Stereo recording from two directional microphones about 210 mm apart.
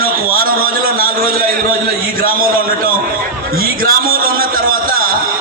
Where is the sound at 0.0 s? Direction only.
45° right (ahead or behind).